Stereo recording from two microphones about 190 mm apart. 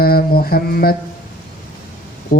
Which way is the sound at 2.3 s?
45° left (ahead or behind).